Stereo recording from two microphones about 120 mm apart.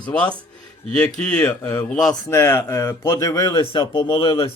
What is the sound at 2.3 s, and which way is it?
Speech, 20° left (ahead or behind).